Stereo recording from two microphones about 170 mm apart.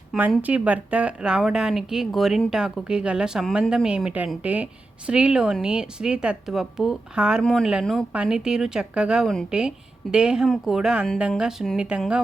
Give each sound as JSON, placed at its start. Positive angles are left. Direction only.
{"t": 0.1, "sound": "speech", "side_deg": -5}